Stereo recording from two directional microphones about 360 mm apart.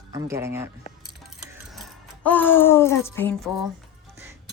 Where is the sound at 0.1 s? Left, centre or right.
Centre.